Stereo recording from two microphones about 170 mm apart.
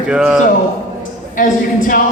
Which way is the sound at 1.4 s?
50° left (ahead or behind).